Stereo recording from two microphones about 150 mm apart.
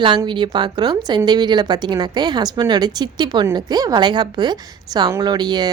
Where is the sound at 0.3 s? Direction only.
30° right (ahead or behind).